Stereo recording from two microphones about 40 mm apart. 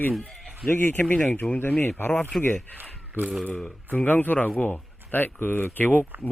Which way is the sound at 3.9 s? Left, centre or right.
Left.